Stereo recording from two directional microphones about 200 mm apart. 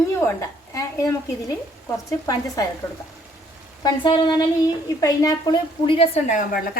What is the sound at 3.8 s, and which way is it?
A woman's voice, 25° left (ahead or behind).